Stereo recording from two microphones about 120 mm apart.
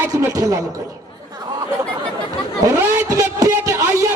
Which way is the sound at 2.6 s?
25° right (ahead or behind).